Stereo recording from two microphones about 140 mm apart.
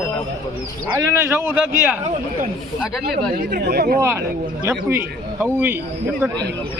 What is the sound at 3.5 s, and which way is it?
Speech, 90° right.